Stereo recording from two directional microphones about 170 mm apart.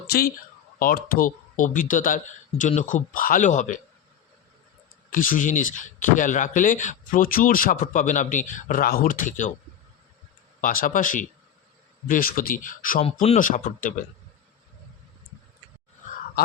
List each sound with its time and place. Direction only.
0.1 s speech: 60° left (ahead or behind)
5.1 s speech: 55° left (ahead or behind)
10.6 s speech: 55° left (ahead or behind)